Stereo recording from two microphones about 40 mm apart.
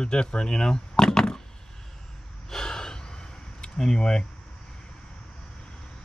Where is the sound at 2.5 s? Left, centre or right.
Centre.